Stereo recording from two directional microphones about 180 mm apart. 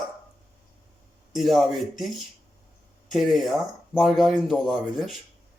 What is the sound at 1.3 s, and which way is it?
Speech, centre (ahead or behind).